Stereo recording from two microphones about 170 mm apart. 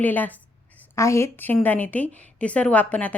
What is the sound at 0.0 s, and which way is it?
A woman's voice, 10° left (ahead or behind).